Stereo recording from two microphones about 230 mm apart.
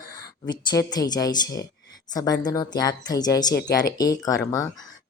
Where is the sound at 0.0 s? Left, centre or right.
Centre.